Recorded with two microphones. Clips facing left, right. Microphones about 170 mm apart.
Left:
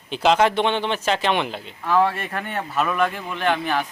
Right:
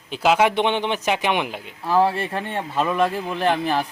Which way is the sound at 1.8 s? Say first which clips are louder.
Right 1 dB; 30° right (ahead or behind).